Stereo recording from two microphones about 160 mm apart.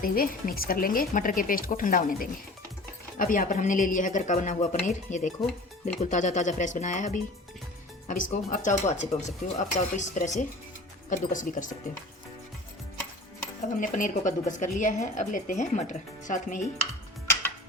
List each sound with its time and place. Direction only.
0.0 s speech: 65° left (ahead or behind)
13.7 s speech: 55° left (ahead or behind)